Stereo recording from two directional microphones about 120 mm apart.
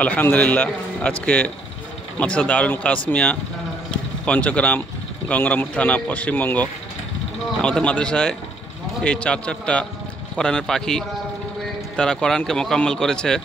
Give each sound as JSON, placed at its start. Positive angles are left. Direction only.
{"t": 0.0, "sound": "speech", "side_deg": 15}